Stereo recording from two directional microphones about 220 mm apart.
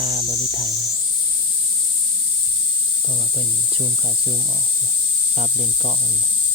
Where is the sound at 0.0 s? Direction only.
30° right (ahead or behind).